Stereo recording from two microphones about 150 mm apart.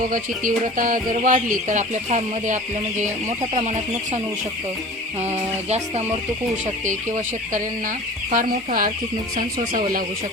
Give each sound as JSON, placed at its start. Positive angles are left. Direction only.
{"t": 0.1, "sound": "speech", "side_deg": -65}
{"t": 3.6, "sound": "speech", "side_deg": -50}
{"t": 5.3, "sound": "speech", "side_deg": -45}
{"t": 8.3, "sound": "speech", "side_deg": -65}